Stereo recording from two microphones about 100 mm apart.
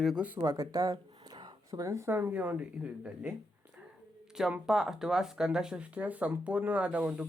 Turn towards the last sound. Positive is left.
turn(degrees=-10)  # may be behind; listen again after turning